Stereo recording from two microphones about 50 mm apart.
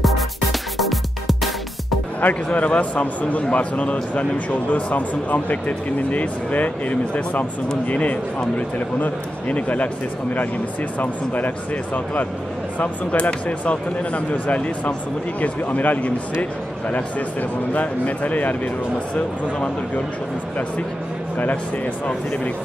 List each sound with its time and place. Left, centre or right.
0.0 s music: centre
2.2 s a man's voice: left
11.0 s a man's voice: left